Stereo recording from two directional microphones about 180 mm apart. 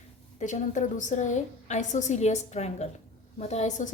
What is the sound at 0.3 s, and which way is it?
A woman's voice, 40° left (ahead or behind).